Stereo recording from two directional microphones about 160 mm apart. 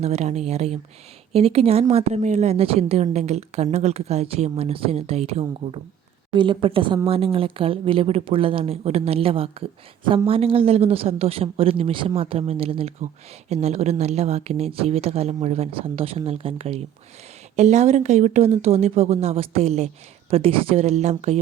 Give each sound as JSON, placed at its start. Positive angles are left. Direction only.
{"t": 0.0, "sound": "a woman's voice", "side_deg": -45}